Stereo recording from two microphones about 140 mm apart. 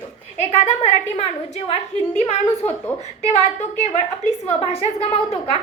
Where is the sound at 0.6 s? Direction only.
50° left (ahead or behind).